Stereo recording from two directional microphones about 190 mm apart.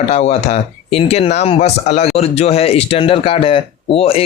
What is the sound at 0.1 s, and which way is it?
Speech, 35° left (ahead or behind).